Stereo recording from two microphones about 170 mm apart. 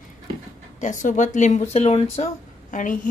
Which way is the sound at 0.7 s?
45° left (ahead or behind).